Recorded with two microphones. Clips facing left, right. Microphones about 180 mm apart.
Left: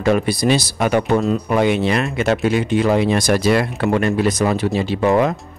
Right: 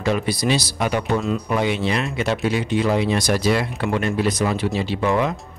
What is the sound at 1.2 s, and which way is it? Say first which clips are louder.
Speech: left 4 dB; 40° left (ahead or behind).